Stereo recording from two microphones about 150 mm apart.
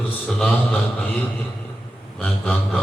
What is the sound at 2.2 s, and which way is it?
Speech, 10° left (ahead or behind).